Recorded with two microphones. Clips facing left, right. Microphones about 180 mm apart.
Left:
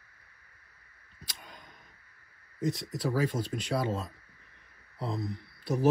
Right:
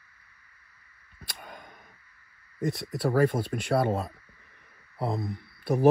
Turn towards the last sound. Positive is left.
turn(degrees=-55)  # may be behind; listen again after turning